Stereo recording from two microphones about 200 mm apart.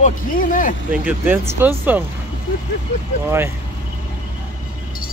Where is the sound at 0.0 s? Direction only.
40° left (ahead or behind).